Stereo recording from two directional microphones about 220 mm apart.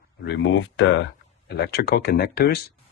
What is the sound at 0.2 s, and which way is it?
Speech, 55° left (ahead or behind).